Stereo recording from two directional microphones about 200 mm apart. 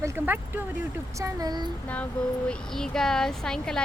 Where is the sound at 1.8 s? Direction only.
5° left (ahead or behind).